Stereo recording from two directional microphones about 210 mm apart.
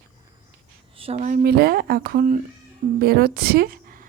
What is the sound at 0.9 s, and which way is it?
A woman's voice, 30° right (ahead or behind).